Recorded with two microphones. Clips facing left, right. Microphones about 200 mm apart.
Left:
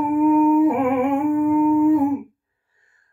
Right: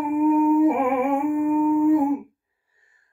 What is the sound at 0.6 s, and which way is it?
Music, 10° right (ahead or behind).